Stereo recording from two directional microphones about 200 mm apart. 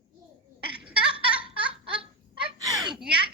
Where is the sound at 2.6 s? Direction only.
20° right (ahead or behind).